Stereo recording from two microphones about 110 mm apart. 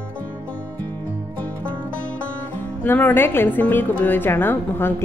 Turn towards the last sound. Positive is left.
turn(degrees=20)  # may be behind; listen again after turning